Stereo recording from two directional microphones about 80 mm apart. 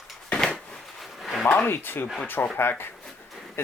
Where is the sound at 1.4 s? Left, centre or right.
Left.